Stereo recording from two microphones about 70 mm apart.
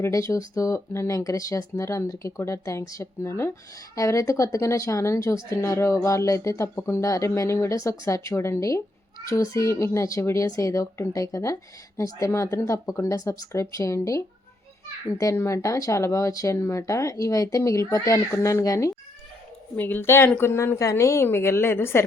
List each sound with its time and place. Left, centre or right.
0.1 s speech: left
15.2 s speech: left
18.3 s speech: left
19.7 s a woman's voice: left
21.0 s a woman's voice: left